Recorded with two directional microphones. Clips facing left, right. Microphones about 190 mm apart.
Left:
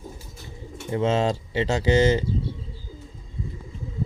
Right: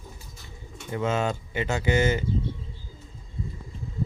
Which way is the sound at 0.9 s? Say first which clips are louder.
Left 4 dB; 30° left (ahead or behind).